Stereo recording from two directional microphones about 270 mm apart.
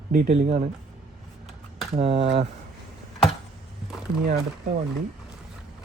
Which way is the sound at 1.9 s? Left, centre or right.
Right.